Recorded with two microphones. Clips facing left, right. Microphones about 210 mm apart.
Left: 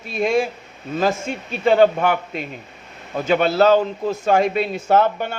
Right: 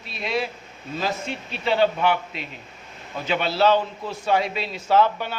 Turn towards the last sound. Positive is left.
turn(degrees=50)  # may be behind; listen again after turning